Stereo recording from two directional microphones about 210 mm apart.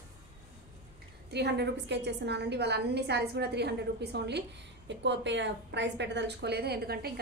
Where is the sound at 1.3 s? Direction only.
55° right (ahead or behind).